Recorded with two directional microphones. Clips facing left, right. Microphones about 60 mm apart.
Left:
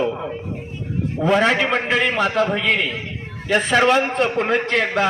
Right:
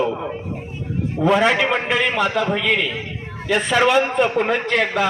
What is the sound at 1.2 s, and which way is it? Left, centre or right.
Speech, centre.